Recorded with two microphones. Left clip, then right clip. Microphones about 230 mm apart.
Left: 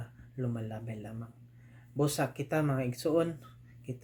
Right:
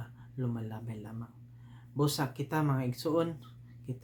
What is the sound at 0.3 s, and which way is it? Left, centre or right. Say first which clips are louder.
Speech: left 1 dB; centre.